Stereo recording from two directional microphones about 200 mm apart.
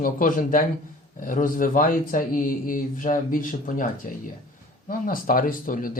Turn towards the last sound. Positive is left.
turn(degrees=45)  # may be behind; listen again after turning